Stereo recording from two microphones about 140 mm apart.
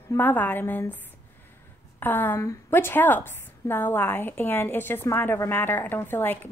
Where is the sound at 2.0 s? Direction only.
15° left (ahead or behind).